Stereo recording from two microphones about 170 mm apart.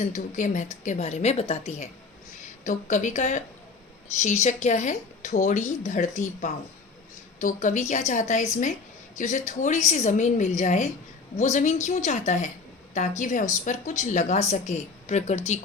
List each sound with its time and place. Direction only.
0.0 s a woman's voice: 45° left (ahead or behind)